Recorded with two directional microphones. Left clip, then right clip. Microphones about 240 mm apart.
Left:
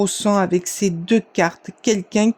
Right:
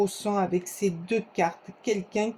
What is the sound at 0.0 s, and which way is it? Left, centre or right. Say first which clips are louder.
Speech: left 8 dB; left.